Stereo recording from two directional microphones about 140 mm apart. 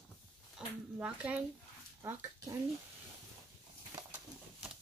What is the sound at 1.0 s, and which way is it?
Speech, 10° right (ahead or behind).